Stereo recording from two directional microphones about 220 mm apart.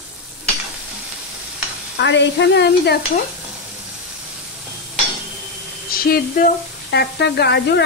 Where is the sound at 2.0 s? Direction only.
55° left (ahead or behind).